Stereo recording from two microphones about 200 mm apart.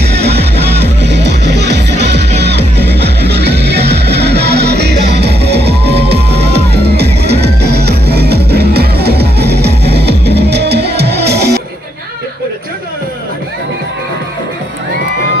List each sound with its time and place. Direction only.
0.0 s music: 55° right (ahead or behind)